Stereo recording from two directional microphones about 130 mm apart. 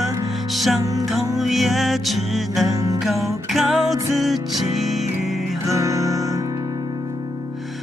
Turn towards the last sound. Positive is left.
turn(degrees=-25)  # may be behind; listen again after turning